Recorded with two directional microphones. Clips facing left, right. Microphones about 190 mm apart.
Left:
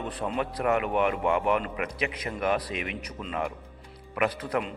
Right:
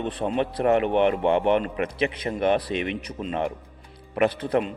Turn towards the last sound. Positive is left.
turn(degrees=-25)  # may be behind; listen again after turning